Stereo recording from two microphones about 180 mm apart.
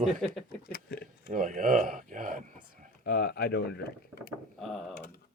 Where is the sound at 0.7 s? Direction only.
65° left (ahead or behind).